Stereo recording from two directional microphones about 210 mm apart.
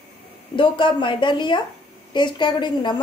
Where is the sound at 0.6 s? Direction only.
25° left (ahead or behind).